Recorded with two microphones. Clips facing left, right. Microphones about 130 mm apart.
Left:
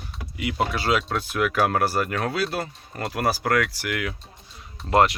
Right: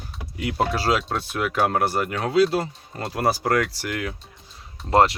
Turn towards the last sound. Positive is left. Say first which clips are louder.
# right 1 dB
turn(degrees=-30)  # may be behind; listen again after turning